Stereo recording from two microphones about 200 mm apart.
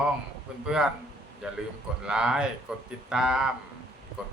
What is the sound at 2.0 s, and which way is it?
Speech, 5° right (ahead or behind).